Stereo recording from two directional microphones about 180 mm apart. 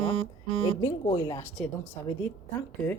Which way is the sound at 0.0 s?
30° left (ahead or behind).